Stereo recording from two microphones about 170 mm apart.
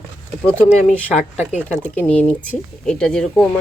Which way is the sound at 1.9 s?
5° left (ahead or behind).